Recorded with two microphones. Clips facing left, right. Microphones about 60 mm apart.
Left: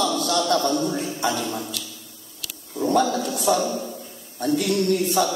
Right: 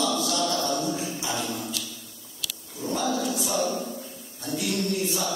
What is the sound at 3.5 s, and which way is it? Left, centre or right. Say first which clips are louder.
Female singing: left 5 dB; left.